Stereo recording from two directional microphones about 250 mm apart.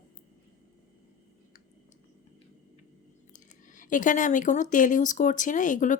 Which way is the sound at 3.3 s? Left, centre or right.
Left.